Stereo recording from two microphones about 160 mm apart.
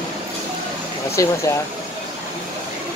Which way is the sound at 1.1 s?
20° left (ahead or behind).